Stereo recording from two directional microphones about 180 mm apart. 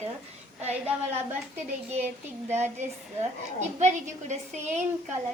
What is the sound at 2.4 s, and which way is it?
A woman's voice, 40° right (ahead or behind).